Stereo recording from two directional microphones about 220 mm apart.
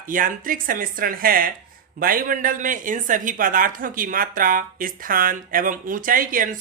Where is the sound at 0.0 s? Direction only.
40° right (ahead or behind).